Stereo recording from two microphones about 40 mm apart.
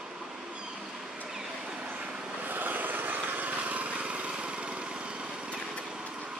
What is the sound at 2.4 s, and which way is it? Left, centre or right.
Vehicle, right.